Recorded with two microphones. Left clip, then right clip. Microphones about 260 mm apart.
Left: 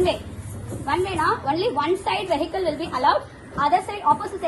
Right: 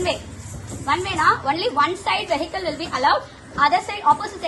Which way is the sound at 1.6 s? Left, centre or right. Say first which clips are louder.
Right 2 dB; right.